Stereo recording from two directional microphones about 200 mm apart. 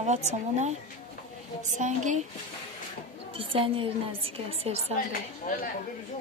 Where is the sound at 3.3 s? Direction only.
25° right (ahead or behind).